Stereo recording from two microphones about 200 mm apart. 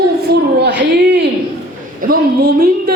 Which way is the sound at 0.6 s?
60° right (ahead or behind).